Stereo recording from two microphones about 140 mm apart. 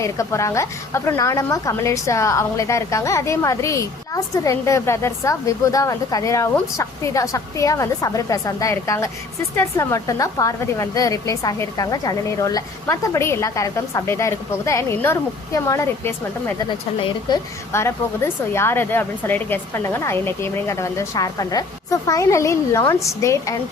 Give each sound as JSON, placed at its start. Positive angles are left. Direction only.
{"t": 0.0, "sound": "a woman's voice", "side_deg": 20}
{"t": 17.7, "sound": "a woman's voice", "side_deg": 20}